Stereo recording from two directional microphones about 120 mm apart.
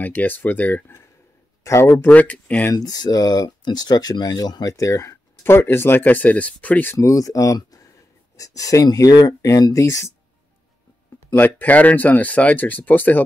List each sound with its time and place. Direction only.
0.0 s speech: 15° left (ahead or behind)
2.7 s speech: 30° left (ahead or behind)
11.1 s speech: 15° left (ahead or behind)